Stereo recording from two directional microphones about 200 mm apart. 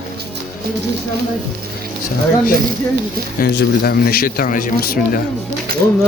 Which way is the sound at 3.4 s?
55° left (ahead or behind).